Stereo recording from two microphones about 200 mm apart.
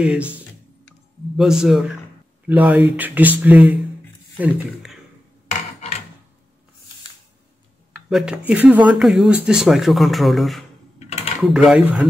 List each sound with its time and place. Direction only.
0.0 s speech: 5° right (ahead or behind)
1.3 s speech: centre (ahead or behind)
5.5 s a sound: 35° left (ahead or behind)
8.1 s speech: 5° right (ahead or behind)
11.0 s typing: 35° left (ahead or behind)
11.4 s speech: 5° right (ahead or behind)